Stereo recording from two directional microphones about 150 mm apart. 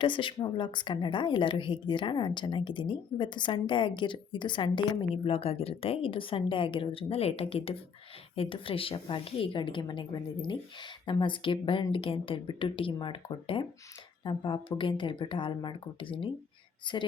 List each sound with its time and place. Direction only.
0.0 s a woman's voice: 35° left (ahead or behind)